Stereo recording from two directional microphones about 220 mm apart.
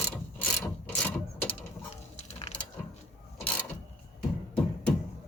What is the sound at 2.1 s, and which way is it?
Ratchet, 30° left (ahead or behind).